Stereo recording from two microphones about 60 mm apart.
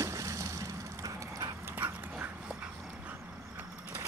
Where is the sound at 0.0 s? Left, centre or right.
Right.